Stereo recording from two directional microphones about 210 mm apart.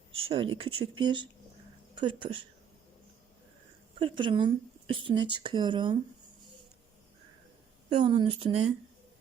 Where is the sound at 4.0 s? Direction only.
25° right (ahead or behind).